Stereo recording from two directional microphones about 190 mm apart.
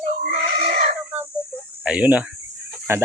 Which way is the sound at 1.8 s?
5° right (ahead or behind).